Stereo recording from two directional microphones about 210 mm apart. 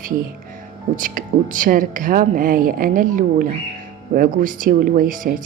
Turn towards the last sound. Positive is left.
turn(degrees=-40)  # may be behind; listen again after turning